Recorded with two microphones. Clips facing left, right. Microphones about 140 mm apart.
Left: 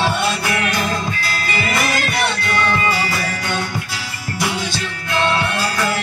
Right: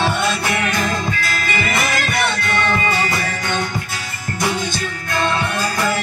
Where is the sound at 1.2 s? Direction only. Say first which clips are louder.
Right 1 dB; 50° right (ahead or behind).